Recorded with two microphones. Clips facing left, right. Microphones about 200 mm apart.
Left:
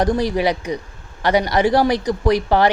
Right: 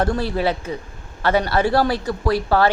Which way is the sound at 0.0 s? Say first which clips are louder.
Left 3 dB; 15° left (ahead or behind).